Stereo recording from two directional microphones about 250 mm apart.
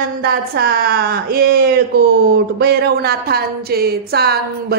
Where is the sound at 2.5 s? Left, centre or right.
Right.